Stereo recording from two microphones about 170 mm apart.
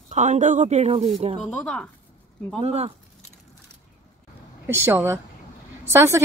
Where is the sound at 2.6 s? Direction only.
35° right (ahead or behind).